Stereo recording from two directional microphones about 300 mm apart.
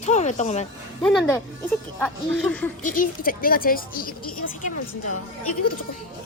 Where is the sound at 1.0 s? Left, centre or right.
Centre.